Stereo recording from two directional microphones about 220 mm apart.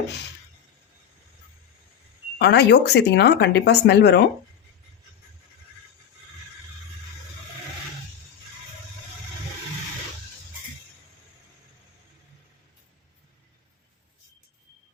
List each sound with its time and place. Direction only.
2.4 s speech: 50° left (ahead or behind)